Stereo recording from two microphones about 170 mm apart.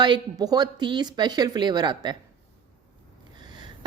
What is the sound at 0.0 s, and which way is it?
A woman's voice, 25° right (ahead or behind).